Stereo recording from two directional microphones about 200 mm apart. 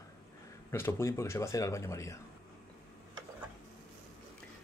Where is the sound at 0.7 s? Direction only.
10° left (ahead or behind).